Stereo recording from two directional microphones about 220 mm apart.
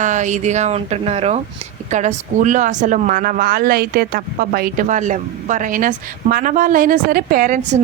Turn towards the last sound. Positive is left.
turn(degrees=-35)  # may be behind; listen again after turning